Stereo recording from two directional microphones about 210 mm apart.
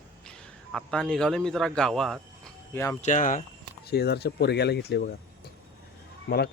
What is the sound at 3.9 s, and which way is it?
Speech, 50° left (ahead or behind).